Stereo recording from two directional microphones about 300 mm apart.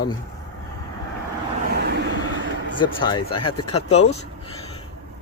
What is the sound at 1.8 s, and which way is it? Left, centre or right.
Vehicle, right.